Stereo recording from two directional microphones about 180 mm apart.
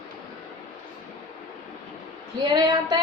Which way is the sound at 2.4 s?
25° right (ahead or behind).